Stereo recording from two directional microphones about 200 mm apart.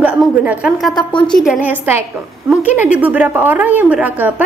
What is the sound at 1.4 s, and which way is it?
A woman's voice, 5° right (ahead or behind).